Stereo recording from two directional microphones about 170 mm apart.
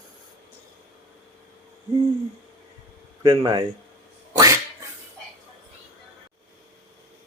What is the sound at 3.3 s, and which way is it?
Speech, 20° right (ahead or behind).